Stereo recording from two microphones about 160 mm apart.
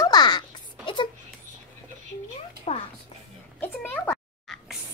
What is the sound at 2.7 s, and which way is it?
Music, 45° left (ahead or behind).